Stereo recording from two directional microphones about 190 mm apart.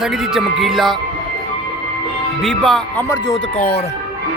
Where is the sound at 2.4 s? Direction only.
5° left (ahead or behind).